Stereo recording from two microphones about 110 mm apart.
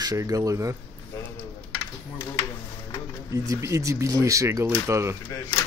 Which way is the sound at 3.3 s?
30° right (ahead or behind).